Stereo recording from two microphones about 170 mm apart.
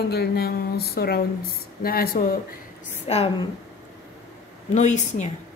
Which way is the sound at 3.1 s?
35° left (ahead or behind).